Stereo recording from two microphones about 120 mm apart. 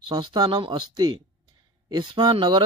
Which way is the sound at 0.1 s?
35° right (ahead or behind).